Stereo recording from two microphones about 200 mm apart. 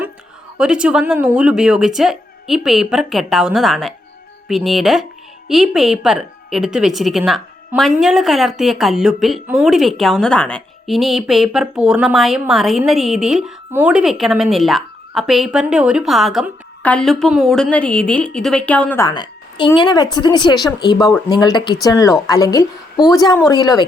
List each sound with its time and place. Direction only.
0.6 s a woman's voice: 5° right (ahead or behind); by 23.8 s 20° left (ahead or behind)